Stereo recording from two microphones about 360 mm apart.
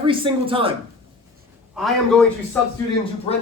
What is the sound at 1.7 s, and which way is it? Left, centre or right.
Speech, centre.